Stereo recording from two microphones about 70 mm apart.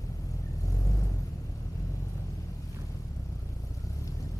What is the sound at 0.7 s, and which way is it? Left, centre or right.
Vehicle, left.